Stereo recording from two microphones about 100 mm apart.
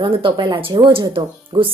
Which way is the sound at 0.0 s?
60° right (ahead or behind).